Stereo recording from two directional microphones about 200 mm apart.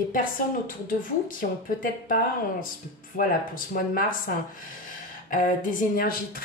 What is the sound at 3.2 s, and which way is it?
Speech, 45° left (ahead or behind).